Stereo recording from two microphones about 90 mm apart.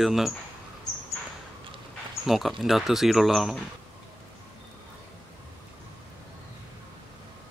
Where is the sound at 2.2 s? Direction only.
5° right (ahead or behind).